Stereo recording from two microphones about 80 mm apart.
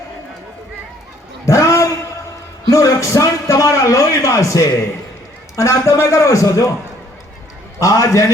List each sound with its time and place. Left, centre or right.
1.5 s a sound: left
2.6 s a man's voice: left
7.8 s a man's voice: left